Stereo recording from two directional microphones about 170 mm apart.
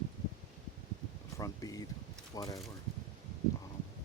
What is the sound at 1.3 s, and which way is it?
Speech, 20° left (ahead or behind).